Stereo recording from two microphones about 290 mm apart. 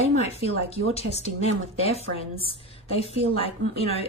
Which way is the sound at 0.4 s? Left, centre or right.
Left.